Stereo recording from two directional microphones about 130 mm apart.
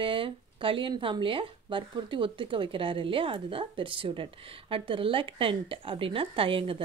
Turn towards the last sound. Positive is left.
turn(degrees=-45)  # may be behind; listen again after turning